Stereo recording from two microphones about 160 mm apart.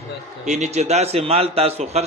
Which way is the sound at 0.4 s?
45° right (ahead or behind).